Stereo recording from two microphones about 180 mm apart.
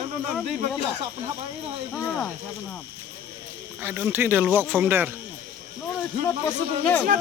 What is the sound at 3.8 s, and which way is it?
Speech, 10° right (ahead or behind).